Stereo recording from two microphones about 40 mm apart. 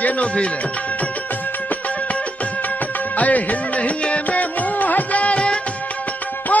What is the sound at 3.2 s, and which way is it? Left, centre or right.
Music, left.